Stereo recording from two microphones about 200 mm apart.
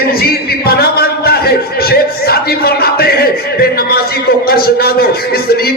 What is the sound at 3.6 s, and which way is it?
A man's voice, 50° left (ahead or behind).